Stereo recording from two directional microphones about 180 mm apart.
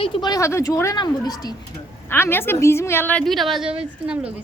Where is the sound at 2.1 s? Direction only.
10° left (ahead or behind).